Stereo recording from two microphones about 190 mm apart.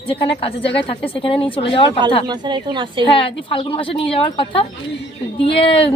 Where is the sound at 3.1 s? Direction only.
30° left (ahead or behind).